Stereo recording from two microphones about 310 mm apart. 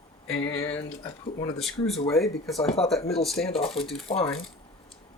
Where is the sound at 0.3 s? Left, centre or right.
Centre.